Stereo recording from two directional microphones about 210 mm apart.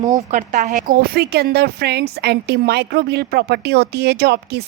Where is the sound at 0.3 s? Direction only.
35° right (ahead or behind).